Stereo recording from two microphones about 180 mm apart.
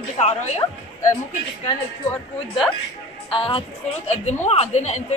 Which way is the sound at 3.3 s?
30° left (ahead or behind).